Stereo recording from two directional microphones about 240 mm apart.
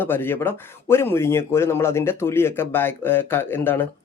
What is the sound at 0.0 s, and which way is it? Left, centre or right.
A man's voice, centre.